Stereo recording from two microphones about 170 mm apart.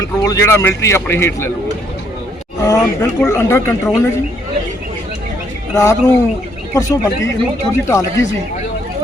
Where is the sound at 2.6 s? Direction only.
20° left (ahead or behind).